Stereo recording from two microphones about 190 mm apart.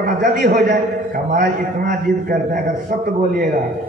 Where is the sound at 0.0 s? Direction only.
45° right (ahead or behind).